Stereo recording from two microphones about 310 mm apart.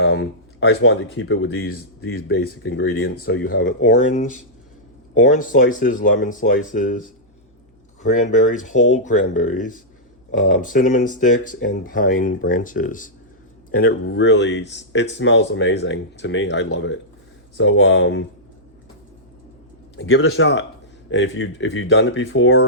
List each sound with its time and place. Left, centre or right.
0.0 s speech: left
3.4 s speech: left
8.0 s speech: left
20.0 s speech: left